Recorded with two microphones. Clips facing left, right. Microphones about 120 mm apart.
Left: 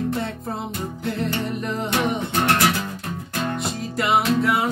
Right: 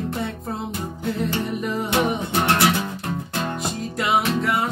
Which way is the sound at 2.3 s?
15° right (ahead or behind).